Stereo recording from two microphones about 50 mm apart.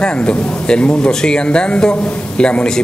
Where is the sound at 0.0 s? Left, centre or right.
Centre.